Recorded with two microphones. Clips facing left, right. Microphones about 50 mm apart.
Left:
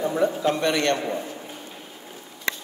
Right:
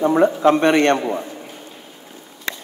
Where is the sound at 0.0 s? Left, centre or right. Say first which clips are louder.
Right 8 dB; right.